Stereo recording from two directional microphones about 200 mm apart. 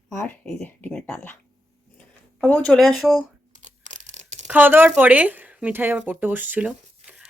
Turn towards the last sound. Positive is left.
turn(degrees=-5)  # may be behind; listen again after turning